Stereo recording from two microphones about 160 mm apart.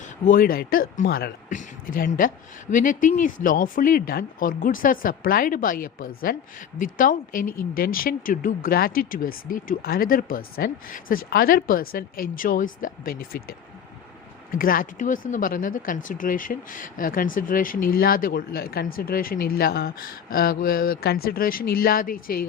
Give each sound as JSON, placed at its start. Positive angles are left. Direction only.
{"t": 0.0, "sound": "speech", "side_deg": 60}
{"t": 1.5, "sound": "speech", "side_deg": 55}